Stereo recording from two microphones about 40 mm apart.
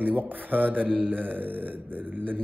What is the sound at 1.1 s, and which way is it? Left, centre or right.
Mantra, right.